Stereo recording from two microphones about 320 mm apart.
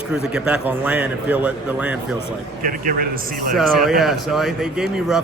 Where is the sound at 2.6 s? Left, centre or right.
Right.